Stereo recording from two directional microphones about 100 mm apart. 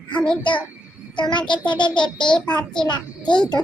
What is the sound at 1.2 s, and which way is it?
A child's voice, 50° left (ahead or behind).